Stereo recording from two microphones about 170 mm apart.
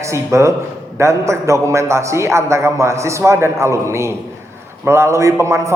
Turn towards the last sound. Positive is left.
turn(degrees=-15)  # may be behind; listen again after turning